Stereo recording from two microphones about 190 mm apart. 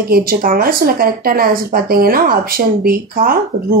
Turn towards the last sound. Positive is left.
turn(degrees=-50)  # may be behind; listen again after turning